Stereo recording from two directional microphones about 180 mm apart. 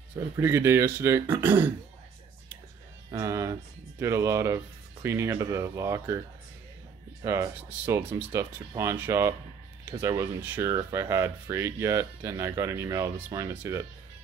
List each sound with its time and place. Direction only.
0.4 s speech: 15° right (ahead or behind)
3.1 s speech: 15° right (ahead or behind)
7.2 s speech: 15° right (ahead or behind)